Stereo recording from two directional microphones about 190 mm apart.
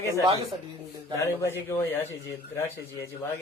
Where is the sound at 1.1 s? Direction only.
15° left (ahead or behind).